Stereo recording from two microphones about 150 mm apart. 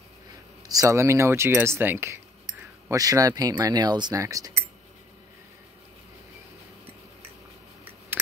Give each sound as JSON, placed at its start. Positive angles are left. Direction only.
{"t": 0.7, "sound": "speech", "side_deg": -20}